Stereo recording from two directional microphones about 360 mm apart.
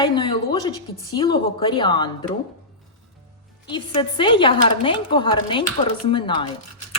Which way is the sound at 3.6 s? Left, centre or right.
Centre.